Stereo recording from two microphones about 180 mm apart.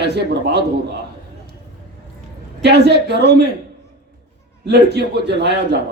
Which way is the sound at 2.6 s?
70° right (ahead or behind).